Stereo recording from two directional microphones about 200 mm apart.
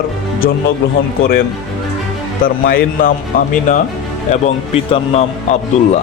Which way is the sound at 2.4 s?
45° left (ahead or behind).